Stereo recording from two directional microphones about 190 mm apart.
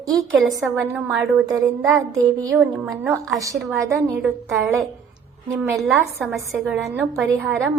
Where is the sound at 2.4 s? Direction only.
15° right (ahead or behind).